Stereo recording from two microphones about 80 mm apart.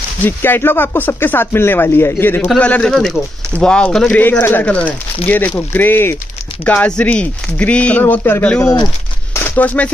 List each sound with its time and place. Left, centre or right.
0.2 s speech: left
2.6 s speech: centre
2.9 s speech: centre
3.5 s speech: centre
4.1 s speech: left
9.8 s speech: centre